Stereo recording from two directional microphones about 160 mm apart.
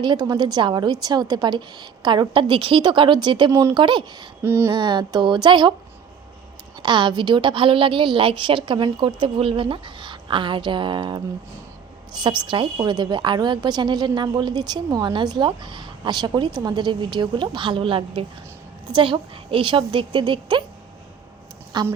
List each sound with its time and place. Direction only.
0.0 s a woman's voice: 25° right (ahead or behind)
4.4 s a sound: 15° right (ahead or behind)
4.7 s a woman's voice: 30° right (ahead or behind)
6.8 s a woman's voice: 30° right (ahead or behind)
21.7 s a woman's voice: 25° right (ahead or behind)